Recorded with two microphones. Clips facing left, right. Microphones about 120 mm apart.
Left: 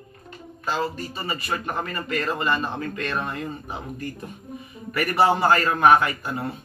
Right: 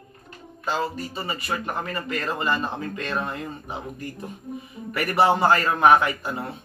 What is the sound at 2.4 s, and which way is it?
Speech, 20° right (ahead or behind).